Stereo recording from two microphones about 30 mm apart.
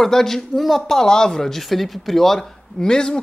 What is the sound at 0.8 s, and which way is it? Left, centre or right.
Speech, centre.